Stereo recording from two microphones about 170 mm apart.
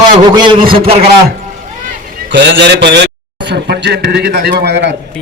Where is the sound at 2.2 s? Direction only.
90° right.